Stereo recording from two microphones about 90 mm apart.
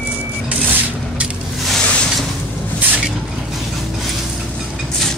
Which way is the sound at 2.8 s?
15° right (ahead or behind).